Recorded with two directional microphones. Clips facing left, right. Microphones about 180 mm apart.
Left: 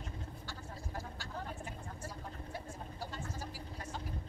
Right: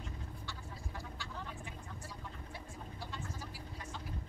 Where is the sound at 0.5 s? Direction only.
40° left (ahead or behind).